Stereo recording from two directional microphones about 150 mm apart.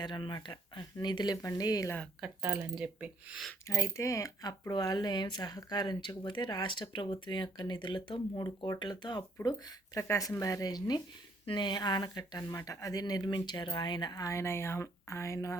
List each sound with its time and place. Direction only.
0.0 s speech: 30° left (ahead or behind)
2.2 s speech: 10° right (ahead or behind)
3.7 s speech: 20° left (ahead or behind)